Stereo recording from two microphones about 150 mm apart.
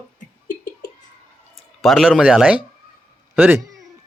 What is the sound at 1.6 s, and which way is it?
Speech, centre (ahead or behind).